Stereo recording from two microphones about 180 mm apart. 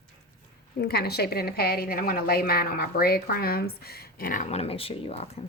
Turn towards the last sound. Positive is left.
turn(degrees=35)  # may be behind; listen again after turning